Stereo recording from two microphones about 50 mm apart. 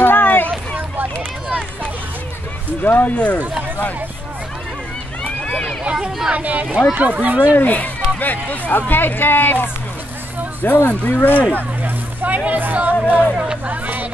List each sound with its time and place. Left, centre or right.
0.0 s a sound: left
0.5 s a sound: right
2.8 s speech: left
5.9 s a sound: centre
6.3 s speech: right
7.5 s speech: left
11.5 s vehicle: right
12.4 s speech: right
13.7 s music: right